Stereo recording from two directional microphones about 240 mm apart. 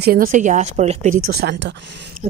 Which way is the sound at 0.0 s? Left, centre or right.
Right.